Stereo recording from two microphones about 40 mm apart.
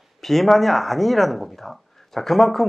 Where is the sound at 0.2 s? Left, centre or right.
Centre.